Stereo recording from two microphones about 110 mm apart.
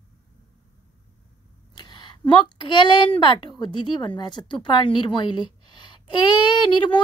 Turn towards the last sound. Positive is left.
turn(degrees=45)  # may be behind; listen again after turning